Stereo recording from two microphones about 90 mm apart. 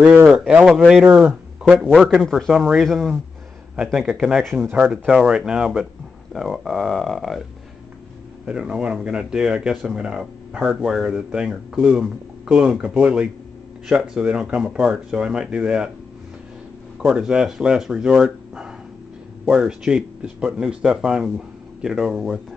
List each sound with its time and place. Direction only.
0.0 s a man's voice: 20° right (ahead or behind)
1.8 s speech: centre (ahead or behind)
8.5 s speech: 10° right (ahead or behind)
17.0 s speech: 10° right (ahead or behind)